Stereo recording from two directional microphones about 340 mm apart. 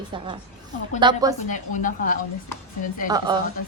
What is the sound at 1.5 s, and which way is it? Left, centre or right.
Speech, left.